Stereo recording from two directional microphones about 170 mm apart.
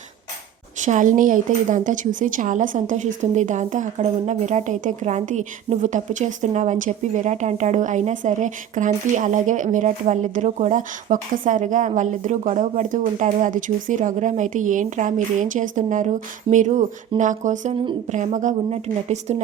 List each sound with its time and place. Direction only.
0.9 s speech: 50° right (ahead or behind)